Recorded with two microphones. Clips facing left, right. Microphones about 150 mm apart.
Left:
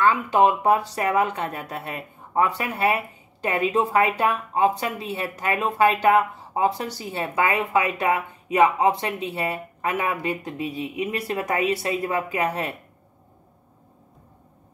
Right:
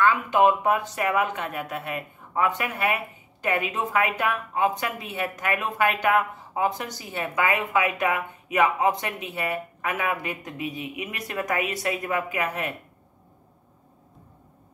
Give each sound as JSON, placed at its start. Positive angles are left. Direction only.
{"t": 0.0, "sound": "speech", "side_deg": 30}